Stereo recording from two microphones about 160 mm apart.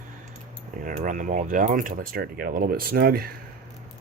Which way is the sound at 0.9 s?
55° right (ahead or behind).